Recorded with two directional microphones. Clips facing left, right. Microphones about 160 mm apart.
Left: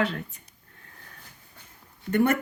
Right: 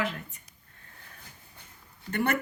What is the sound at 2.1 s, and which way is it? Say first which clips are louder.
Speech: left 6 dB; 50° left (ahead or behind).